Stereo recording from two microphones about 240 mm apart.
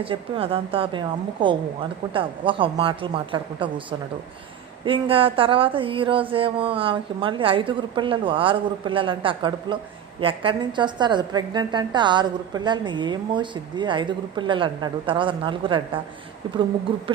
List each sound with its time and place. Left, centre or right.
0.0 s a woman's voice: right
4.9 s a woman's voice: right